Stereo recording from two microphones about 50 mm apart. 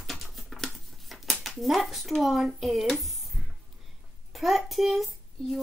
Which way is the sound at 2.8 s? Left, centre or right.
Centre.